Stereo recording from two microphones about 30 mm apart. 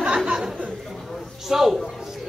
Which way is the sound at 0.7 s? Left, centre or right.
Centre.